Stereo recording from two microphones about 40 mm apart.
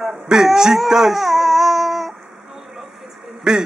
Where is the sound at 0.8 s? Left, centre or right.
Centre.